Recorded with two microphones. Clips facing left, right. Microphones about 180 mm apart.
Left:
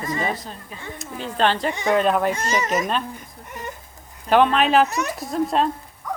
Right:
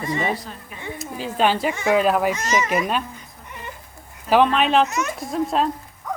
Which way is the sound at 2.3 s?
35° left (ahead or behind).